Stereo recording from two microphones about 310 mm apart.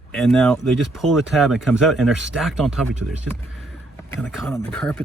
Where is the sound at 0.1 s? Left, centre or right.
Centre.